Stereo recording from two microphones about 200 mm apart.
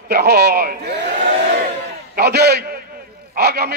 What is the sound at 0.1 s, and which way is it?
Speech, 55° right (ahead or behind).